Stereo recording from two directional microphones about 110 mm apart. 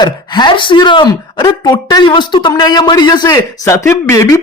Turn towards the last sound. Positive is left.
turn(degrees=25)  # may be behind; listen again after turning